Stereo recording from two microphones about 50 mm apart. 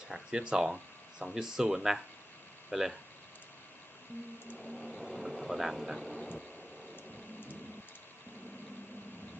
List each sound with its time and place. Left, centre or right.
0.1 s speech: centre
4.6 s train: centre
5.0 s vehicle: centre
6.0 s vehicle: left